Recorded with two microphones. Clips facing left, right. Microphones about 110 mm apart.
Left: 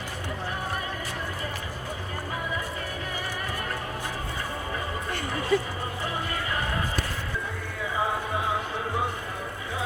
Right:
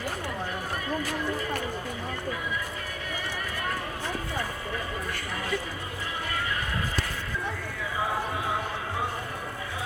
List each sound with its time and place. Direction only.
5.5 s speech: 30° left (ahead or behind)